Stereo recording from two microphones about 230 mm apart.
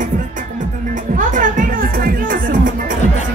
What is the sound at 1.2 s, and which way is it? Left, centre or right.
Music, right.